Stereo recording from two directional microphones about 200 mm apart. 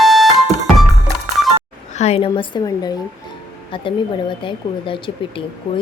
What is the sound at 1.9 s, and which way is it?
Speech, 35° left (ahead or behind).